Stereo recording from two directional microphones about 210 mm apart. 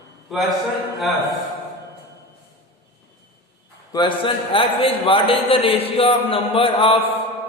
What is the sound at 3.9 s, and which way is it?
Music, 25° left (ahead or behind).